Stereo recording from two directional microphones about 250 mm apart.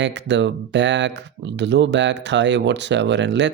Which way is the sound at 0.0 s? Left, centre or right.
Right.